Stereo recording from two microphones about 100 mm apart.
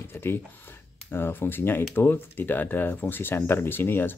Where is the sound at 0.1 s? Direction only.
25° left (ahead or behind).